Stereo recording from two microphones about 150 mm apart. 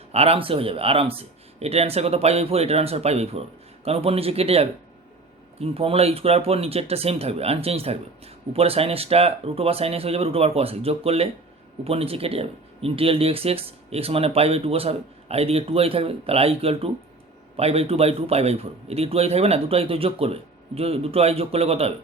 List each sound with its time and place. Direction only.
0.1 s speech: 40° right (ahead or behind)